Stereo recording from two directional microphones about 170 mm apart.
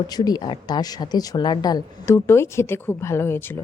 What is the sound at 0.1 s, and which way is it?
Speech, 25° left (ahead or behind).